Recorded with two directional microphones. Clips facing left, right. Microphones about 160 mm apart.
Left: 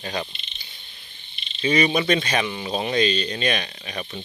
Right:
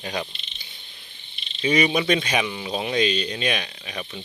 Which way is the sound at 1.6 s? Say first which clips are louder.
Even; 10° right (ahead or behind).